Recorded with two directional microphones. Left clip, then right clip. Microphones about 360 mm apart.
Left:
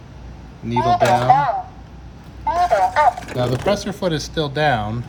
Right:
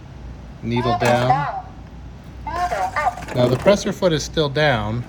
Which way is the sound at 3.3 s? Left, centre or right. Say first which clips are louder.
Right 4 dB; centre.